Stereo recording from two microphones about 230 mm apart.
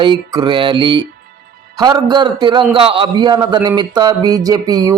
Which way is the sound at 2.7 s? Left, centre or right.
Right.